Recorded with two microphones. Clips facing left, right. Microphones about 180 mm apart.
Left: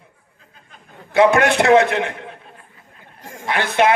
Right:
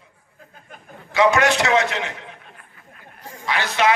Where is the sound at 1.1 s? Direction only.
55° left (ahead or behind).